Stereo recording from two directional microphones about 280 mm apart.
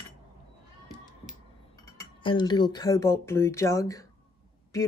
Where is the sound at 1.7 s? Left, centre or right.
Centre.